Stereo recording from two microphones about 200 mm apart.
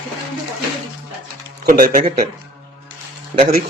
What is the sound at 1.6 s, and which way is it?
Speech, 45° right (ahead or behind).